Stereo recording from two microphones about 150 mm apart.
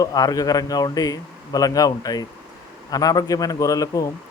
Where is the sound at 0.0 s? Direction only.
25° left (ahead or behind).